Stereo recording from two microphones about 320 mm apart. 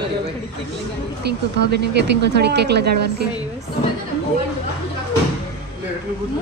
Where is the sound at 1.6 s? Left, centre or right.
Right.